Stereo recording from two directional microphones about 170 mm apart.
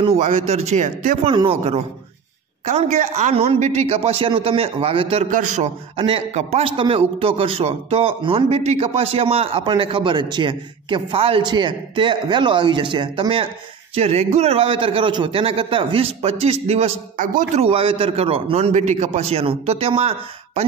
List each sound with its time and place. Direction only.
0.0 s a man's voice: 40° right (ahead or behind)
1.3 s a man's voice: 35° right (ahead or behind)
5.3 s a man's voice: 45° right (ahead or behind)